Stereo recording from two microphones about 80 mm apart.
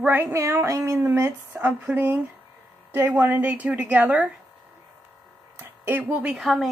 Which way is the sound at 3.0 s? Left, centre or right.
Centre.